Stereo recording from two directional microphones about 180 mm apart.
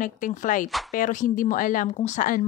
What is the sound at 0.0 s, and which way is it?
A woman's voice, 45° left (ahead or behind).